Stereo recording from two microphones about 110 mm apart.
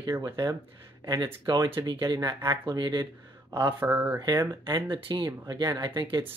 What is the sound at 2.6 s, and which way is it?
Speech, 45° right (ahead or behind).